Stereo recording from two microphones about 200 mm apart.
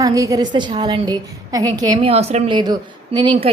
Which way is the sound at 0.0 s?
15° right (ahead or behind).